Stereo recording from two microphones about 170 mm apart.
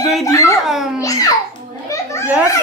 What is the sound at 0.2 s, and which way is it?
Speech, 20° left (ahead or behind).